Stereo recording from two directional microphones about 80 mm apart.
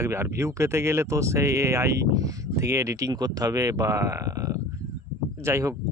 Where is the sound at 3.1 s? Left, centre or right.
Right.